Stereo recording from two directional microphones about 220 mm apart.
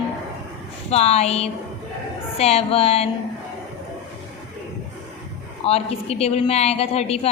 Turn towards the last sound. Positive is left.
turn(degrees=25)  # may be behind; listen again after turning